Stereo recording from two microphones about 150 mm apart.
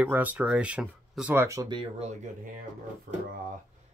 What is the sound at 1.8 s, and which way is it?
Speech, 45° right (ahead or behind).